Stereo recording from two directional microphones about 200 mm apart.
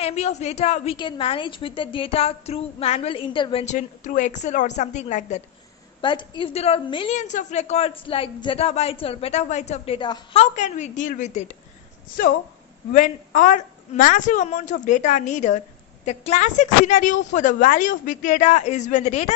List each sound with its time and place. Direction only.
0.0 s a woman's voice: 30° left (ahead or behind)
3.6 s speech: 40° left (ahead or behind)
5.9 s a woman's voice: 25° left (ahead or behind)
10.4 s speech: 35° left (ahead or behind)
12.9 s speech: 40° left (ahead or behind)